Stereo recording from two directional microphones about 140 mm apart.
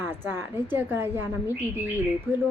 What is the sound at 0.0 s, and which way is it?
A woman's voice, 15° right (ahead or behind).